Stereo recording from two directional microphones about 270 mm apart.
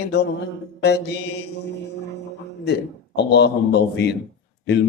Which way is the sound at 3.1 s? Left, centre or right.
Left.